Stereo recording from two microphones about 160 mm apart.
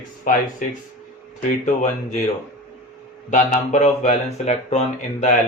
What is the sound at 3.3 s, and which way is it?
Speech, 50° left (ahead or behind).